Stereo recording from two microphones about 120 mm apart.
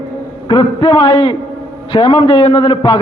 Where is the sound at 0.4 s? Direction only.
40° left (ahead or behind).